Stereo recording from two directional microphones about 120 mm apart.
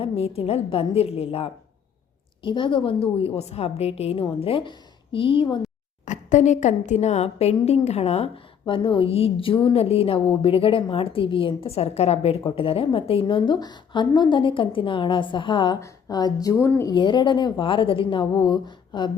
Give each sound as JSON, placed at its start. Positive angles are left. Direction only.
{"t": 0.0, "sound": "a woman's voice", "side_deg": 55}
{"t": 2.4, "sound": "a woman's voice", "side_deg": 45}
{"t": 6.1, "sound": "a woman's voice", "side_deg": 85}
{"t": 8.6, "sound": "a woman's voice", "side_deg": 45}
{"t": 16.9, "sound": "a woman's voice", "side_deg": 40}